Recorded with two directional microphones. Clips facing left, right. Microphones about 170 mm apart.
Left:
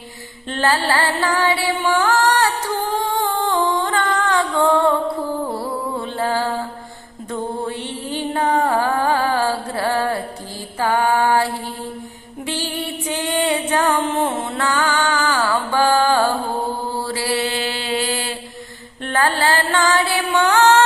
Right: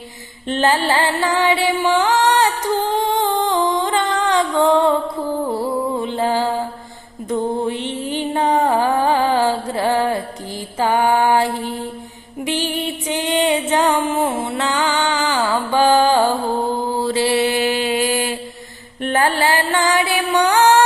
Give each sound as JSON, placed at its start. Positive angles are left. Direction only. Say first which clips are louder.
{"t": 0.4, "sound": "music", "louder": "right 2 dB", "side_deg": -20}
{"t": 3.0, "sound": "humming", "louder": "right 3 dB", "side_deg": -20}
{"t": 5.5, "sound": "music", "louder": "right 4 dB", "side_deg": -15}
{"t": 10.8, "sound": "female singing", "louder": "right 2 dB", "side_deg": -20}
{"t": 12.5, "sound": "music", "louder": "right 3 dB", "side_deg": -20}
{"t": 16.9, "sound": "mantra", "louder": "right 5 dB", "side_deg": -20}
{"t": 19.0, "sound": "music", "louder": "right 2 dB", "side_deg": -20}